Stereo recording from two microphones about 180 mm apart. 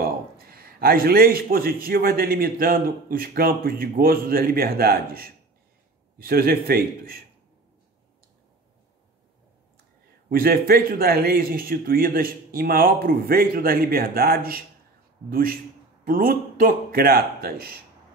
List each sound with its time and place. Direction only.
0.0 s a man's voice: 55° right (ahead or behind)
10.3 s a man's voice: 55° right (ahead or behind)